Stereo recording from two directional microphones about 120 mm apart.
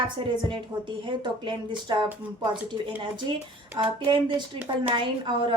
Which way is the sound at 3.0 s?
45° right (ahead or behind).